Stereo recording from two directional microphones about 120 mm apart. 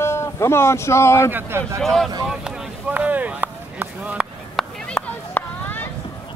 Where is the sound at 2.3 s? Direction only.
10° right (ahead or behind).